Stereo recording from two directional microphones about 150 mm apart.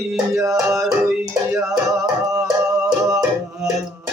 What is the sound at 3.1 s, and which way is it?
Music, 25° right (ahead or behind).